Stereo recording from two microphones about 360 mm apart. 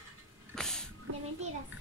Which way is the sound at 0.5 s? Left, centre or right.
Centre.